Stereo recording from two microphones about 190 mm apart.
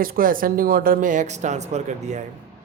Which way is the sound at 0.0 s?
50° right (ahead or behind).